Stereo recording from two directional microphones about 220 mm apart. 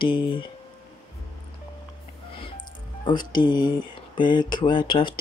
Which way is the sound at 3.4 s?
20° left (ahead or behind).